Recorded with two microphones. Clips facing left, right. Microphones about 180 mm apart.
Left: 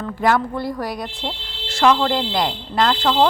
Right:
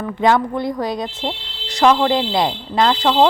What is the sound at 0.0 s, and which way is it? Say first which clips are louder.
A woman's voice: right 3 dB; 20° right (ahead or behind).